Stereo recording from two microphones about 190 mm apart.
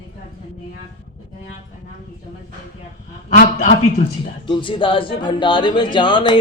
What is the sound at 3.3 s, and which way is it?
Speech, 40° left (ahead or behind).